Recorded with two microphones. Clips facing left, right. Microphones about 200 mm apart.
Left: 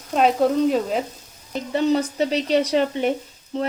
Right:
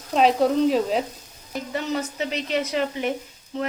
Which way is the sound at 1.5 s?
30° left (ahead or behind).